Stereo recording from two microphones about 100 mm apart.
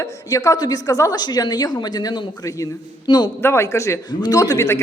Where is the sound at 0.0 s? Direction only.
30° left (ahead or behind).